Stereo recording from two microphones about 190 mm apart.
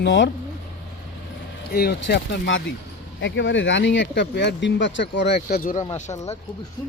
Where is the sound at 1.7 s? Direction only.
55° left (ahead or behind).